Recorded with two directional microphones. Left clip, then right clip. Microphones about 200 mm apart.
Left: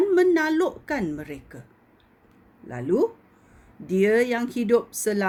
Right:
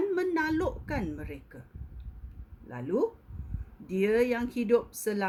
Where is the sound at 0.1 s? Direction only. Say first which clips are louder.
Left 9 dB; 50° left (ahead or behind).